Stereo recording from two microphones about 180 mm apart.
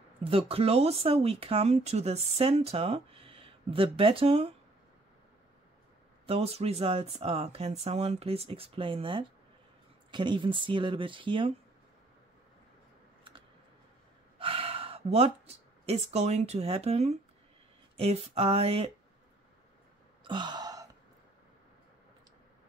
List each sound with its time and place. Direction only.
0.2 s speech: 30° right (ahead or behind)
6.2 s speech: 35° right (ahead or behind)
14.4 s speech: 30° right (ahead or behind)
20.2 s gasp: 25° right (ahead or behind)